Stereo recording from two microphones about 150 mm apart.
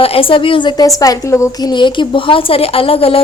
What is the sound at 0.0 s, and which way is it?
A woman's voice, 40° left (ahead or behind).